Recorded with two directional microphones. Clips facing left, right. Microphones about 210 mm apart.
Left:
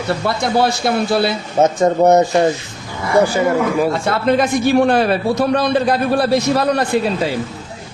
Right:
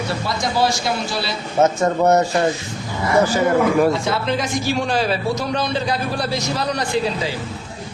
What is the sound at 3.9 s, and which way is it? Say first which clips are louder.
A man's voice: left 4 dB; 60° left (ahead or behind).